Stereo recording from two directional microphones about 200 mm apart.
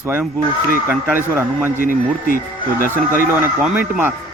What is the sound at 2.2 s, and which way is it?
Speech, 45° left (ahead or behind).